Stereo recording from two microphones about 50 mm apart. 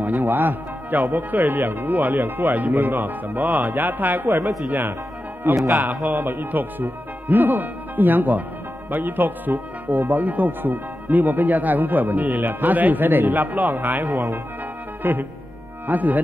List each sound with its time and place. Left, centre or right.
0.0 s speech: right
15.0 s speech: right